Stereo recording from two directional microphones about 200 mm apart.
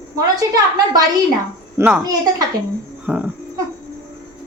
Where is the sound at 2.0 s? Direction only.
20° right (ahead or behind).